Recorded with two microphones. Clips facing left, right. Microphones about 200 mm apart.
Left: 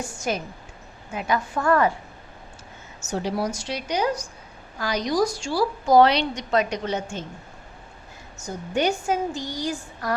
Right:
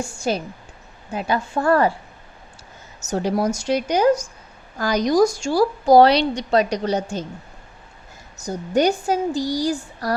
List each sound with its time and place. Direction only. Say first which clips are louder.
0.0 s a woman's voice: right 4 dB; 30° right (ahead or behind)
3.1 s a woman's voice: right 5 dB; 45° right (ahead or behind)
8.4 s a woman's voice: right 6 dB; 40° right (ahead or behind)